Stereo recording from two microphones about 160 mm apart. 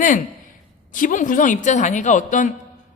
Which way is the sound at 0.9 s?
55° left (ahead or behind).